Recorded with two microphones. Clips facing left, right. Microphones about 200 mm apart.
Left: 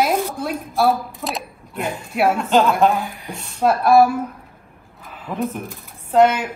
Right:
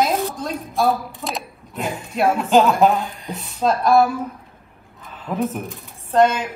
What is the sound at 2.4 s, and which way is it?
A woman's voice, centre (ahead or behind).